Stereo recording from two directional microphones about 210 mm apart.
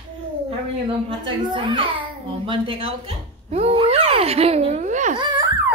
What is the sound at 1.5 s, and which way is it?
A child's voice, 25° right (ahead or behind).